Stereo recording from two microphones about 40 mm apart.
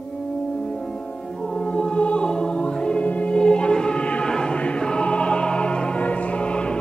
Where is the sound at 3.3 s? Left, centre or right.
Left.